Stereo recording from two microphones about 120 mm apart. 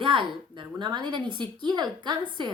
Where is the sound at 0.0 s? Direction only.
45° right (ahead or behind).